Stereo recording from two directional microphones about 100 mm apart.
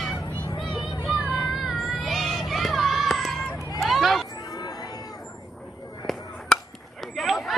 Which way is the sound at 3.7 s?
Centre (ahead or behind).